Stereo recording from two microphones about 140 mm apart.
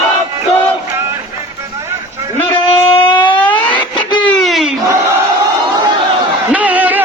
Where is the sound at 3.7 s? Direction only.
35° left (ahead or behind).